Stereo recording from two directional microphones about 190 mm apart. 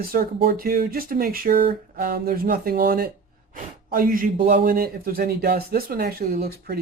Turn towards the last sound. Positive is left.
turn(degrees=-55)  # may be behind; listen again after turning